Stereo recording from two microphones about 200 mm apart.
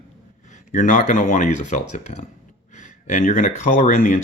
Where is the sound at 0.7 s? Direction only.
40° left (ahead or behind).